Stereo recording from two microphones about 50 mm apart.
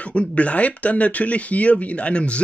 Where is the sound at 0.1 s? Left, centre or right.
Left.